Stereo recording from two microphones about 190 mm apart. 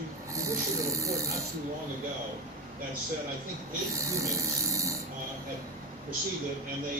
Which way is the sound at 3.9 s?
15° right (ahead or behind).